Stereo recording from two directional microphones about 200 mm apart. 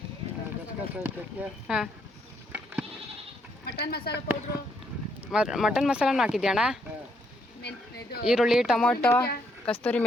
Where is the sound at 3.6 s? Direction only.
50° left (ahead or behind).